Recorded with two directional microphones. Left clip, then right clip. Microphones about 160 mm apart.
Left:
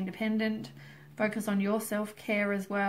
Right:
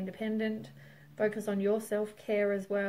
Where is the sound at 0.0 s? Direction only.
25° right (ahead or behind).